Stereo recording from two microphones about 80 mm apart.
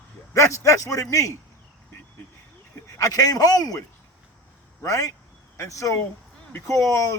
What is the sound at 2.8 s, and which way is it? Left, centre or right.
A man's voice, left.